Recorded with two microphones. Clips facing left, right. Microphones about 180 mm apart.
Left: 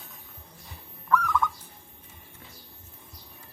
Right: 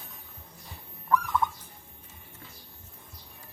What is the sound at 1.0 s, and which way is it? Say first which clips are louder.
Bird: left 1 dB; 25° right (ahead or behind).